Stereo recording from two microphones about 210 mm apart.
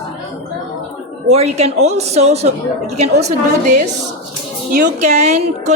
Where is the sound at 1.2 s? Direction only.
30° right (ahead or behind).